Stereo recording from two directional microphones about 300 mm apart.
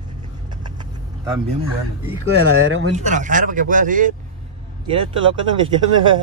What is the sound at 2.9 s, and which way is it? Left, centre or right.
Speech, right.